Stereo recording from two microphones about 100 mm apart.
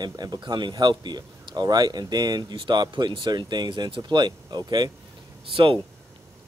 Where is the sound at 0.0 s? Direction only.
45° right (ahead or behind).